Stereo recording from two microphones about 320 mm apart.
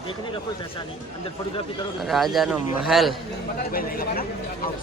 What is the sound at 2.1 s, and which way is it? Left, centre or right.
Speech, centre.